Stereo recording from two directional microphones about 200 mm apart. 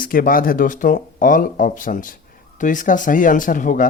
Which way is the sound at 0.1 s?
45° left (ahead or behind).